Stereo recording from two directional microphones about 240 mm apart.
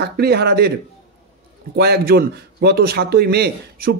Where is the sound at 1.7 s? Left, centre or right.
Right.